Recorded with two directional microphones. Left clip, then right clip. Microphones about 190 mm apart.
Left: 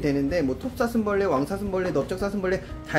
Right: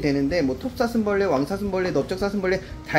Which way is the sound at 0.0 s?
15° right (ahead or behind).